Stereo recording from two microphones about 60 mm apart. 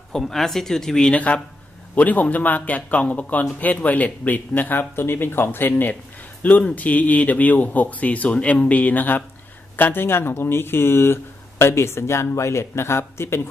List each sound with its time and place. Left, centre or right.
0.1 s speech: centre
1.1 s speech: left